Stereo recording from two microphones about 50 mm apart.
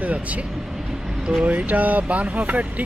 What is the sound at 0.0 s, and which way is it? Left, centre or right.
Speech, right.